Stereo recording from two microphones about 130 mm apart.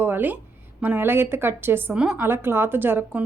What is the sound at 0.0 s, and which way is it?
Speech, 15° right (ahead or behind).